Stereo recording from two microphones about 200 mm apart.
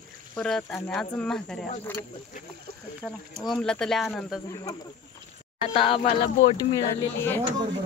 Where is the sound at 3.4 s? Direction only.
5° left (ahead or behind).